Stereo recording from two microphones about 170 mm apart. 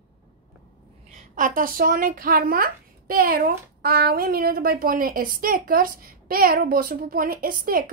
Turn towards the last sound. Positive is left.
turn(degrees=-55)  # may be behind; listen again after turning